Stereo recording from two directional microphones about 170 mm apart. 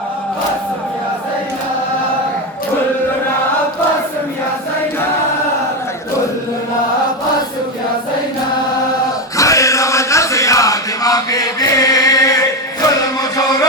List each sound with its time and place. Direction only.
9.4 s chant: 20° left (ahead or behind)